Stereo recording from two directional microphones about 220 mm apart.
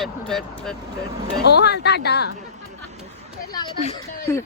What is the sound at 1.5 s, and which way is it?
Speech, 50° left (ahead or behind).